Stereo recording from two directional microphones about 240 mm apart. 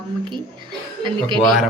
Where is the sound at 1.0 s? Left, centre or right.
Centre.